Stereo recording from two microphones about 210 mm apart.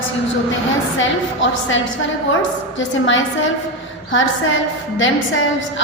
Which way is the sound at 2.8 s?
65° left (ahead or behind).